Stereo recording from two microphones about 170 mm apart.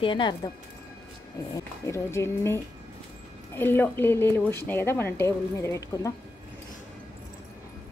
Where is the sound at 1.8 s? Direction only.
15° left (ahead or behind).